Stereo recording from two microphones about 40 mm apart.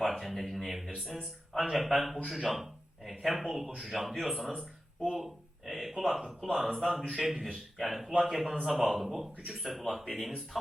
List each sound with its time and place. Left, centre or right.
0.0 s speech: centre
0.9 s speech: centre
1.1 s a man's voice: centre